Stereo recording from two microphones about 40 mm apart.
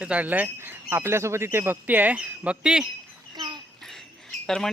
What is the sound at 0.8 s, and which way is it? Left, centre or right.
Speech, right.